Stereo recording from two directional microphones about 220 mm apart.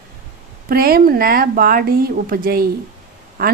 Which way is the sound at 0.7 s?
40° right (ahead or behind).